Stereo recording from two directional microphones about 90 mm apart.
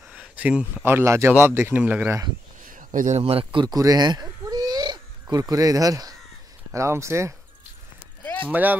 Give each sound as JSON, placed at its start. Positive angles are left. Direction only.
{"t": 0.4, "sound": "speech", "side_deg": -10}
{"t": 0.8, "sound": "speech", "side_deg": -30}
{"t": 1.8, "sound": "speech", "side_deg": -15}
{"t": 3.3, "sound": "speech", "side_deg": -90}
{"t": 3.6, "sound": "owl", "side_deg": -45}
{"t": 5.3, "sound": "speech", "side_deg": -40}
{"t": 8.2, "sound": "a sound", "side_deg": 15}
{"t": 8.5, "sound": "speech", "side_deg": -20}